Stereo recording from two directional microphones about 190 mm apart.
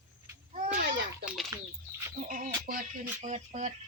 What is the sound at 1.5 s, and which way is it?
Bird flight, 15° right (ahead or behind).